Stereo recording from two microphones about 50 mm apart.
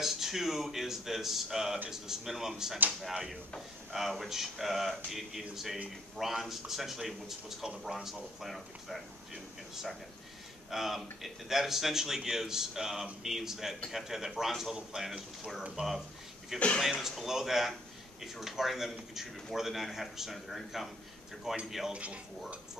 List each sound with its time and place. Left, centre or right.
0.0 s a man's voice: centre
3.9 s a man's voice: centre
16.5 s speech: left
16.8 s speech: centre
21.9 s speech: right